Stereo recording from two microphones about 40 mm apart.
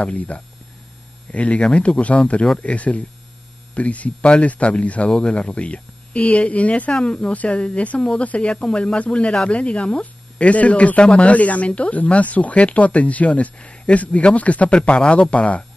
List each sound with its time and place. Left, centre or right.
0.0 s speech: left